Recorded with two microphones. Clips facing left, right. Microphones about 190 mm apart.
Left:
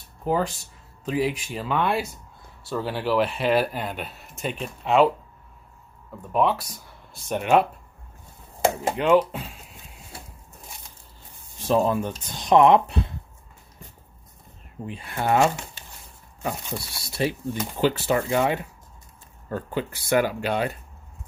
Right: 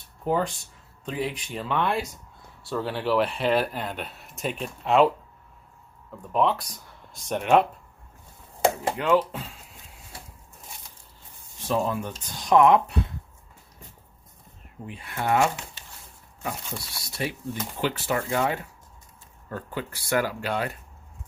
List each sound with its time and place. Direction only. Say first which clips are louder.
0.3 s speech: left 1 dB; 5° left (ahead or behind)
9.0 s speech: left 4 dB; 20° left (ahead or behind)
11.7 s speech: left 5 dB; 30° left (ahead or behind)
14.8 s speech: left 2 dB; 30° left (ahead or behind)
16.6 s speech: left 4 dB; 30° left (ahead or behind)
18.3 s speech: left 3 dB; 20° left (ahead or behind)